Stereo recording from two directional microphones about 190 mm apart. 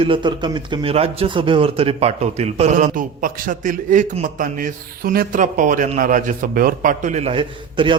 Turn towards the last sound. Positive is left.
turn(degrees=-25)  # may be behind; listen again after turning